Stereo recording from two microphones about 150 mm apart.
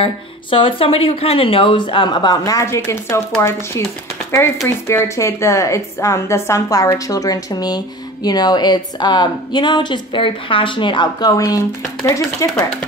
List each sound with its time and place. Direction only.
0.0 s a woman's voice: 35° left (ahead or behind); by 12.6 s 20° left (ahead or behind)